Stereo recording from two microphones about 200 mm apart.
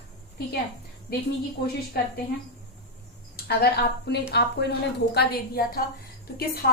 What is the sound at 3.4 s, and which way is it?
A woman's voice, 50° left (ahead or behind).